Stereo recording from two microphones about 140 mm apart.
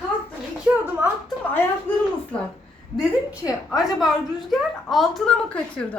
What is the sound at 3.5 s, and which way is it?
A woman's voice, 5° right (ahead or behind).